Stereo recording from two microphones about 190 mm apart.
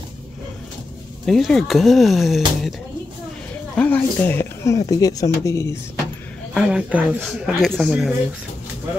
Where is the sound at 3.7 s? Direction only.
10° left (ahead or behind).